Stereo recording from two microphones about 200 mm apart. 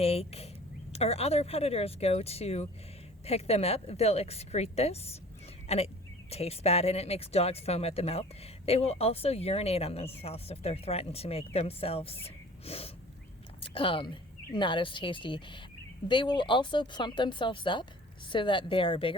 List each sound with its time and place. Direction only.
0.0 s a woman's voice: 30° left (ahead or behind)